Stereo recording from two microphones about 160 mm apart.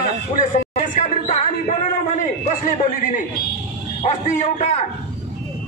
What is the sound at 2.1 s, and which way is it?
A man's voice, 50° left (ahead or behind).